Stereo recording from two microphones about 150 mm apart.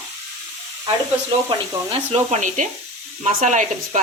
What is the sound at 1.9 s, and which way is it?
Speech, 40° right (ahead or behind).